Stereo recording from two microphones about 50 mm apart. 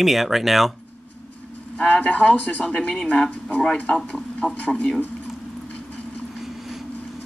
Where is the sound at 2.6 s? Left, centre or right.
Centre.